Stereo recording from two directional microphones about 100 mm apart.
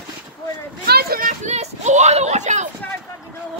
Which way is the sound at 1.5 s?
90° right.